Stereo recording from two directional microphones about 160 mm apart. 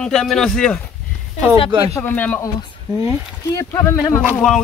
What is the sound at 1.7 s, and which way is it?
Speech, 35° right (ahead or behind).